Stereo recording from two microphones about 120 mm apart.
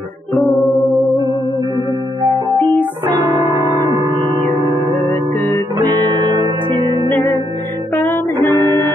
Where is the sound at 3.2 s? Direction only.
35° right (ahead or behind).